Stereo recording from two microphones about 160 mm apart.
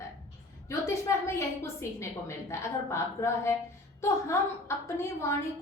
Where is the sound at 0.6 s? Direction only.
20° left (ahead or behind).